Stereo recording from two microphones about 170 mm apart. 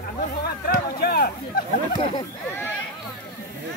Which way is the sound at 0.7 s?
60° left (ahead or behind).